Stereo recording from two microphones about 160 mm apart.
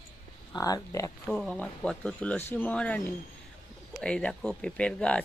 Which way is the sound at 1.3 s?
5° left (ahead or behind).